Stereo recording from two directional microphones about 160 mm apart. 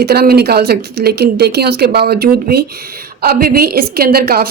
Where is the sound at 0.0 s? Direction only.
80° right.